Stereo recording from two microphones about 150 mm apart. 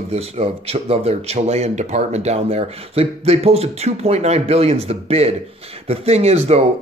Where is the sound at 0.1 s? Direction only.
45° right (ahead or behind).